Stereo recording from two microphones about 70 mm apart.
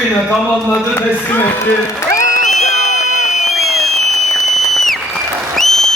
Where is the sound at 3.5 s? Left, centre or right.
Centre.